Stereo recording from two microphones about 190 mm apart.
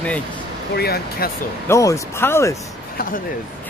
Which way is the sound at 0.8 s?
55° left (ahead or behind).